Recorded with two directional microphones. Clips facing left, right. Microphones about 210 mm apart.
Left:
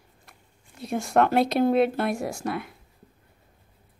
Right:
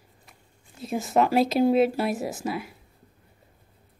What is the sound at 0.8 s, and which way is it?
Speech, centre (ahead or behind).